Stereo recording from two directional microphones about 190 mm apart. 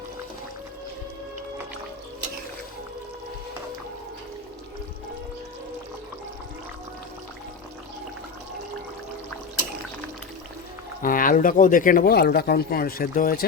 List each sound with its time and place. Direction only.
11.0 s speech: 45° left (ahead or behind)